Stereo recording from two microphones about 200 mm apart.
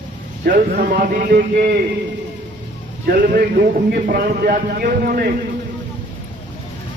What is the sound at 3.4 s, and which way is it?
A man's voice, 50° right (ahead or behind).